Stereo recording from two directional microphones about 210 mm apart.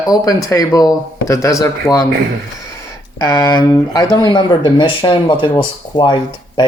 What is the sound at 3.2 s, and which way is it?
Speech, 15° left (ahead or behind).